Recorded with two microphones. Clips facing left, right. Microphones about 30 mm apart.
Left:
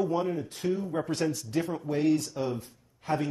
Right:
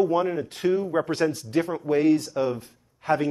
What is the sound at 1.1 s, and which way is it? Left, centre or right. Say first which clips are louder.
Speech: right 5 dB; right.